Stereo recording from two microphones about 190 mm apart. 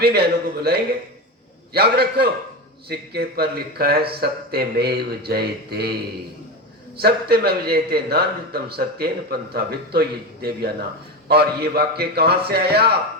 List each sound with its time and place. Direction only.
0.0 s a man's voice: 55° right (ahead or behind)